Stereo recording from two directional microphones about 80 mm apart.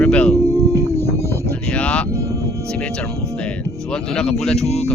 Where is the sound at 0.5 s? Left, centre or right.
Right.